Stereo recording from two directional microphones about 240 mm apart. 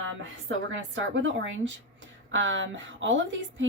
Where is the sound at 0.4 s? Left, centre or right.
Right.